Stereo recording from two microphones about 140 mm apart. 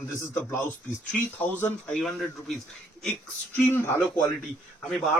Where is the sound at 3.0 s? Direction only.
15° left (ahead or behind).